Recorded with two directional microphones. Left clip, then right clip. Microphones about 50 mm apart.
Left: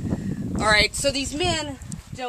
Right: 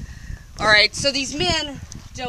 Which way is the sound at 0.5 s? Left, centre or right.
Right.